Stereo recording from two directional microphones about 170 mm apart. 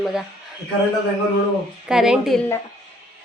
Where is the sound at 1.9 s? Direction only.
5° right (ahead or behind).